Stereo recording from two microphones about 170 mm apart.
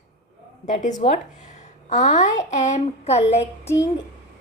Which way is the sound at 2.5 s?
40° left (ahead or behind).